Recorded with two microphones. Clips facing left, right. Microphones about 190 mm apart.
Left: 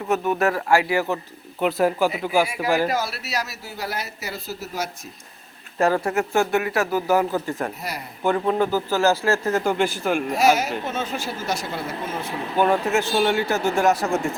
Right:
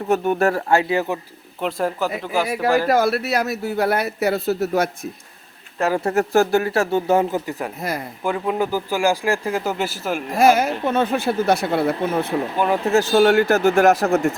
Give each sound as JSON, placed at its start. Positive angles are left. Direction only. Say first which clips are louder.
{"t": 0.1, "sound": "a man's voice", "louder": "right 3 dB", "side_deg": -30}
{"t": 1.6, "sound": "speech", "louder": "left 3 dB", "side_deg": 5}
{"t": 2.9, "sound": "speech", "louder": "right 8 dB", "side_deg": -55}
{"t": 6.0, "sound": "speech", "louder": "right 4 dB", "side_deg": -35}
{"t": 7.8, "sound": "speech", "louder": "right 6 dB", "side_deg": -50}
{"t": 8.2, "sound": "a man's voice", "louder": "left 2 dB", "side_deg": -5}
{"t": 10.3, "sound": "speech", "louder": "right 6 dB", "side_deg": -55}
{"t": 12.5, "sound": "speech", "louder": "left 2 dB", "side_deg": -5}
{"t": 12.8, "sound": "speech", "louder": "right 5 dB", "side_deg": -35}
{"t": 13.7, "sound": "speech", "louder": "right 2 dB", "side_deg": -60}